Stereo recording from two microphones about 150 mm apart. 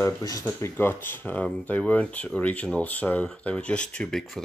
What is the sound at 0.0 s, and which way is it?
Speech, 20° left (ahead or behind).